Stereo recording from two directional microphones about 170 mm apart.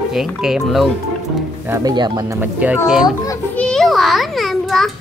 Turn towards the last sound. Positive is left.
turn(degrees=0)  # may be behind; listen again after turning